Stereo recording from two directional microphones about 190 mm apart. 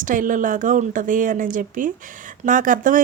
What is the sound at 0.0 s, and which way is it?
Speech, 45° right (ahead or behind).